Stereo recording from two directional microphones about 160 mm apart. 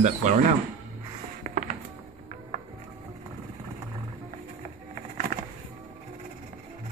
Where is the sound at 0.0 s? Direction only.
45° right (ahead or behind).